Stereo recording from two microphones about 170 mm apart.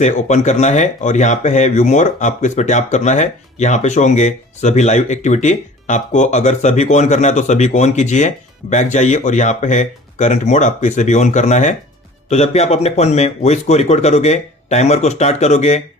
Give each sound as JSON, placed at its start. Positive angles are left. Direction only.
{"t": 0.0, "sound": "speech", "side_deg": 45}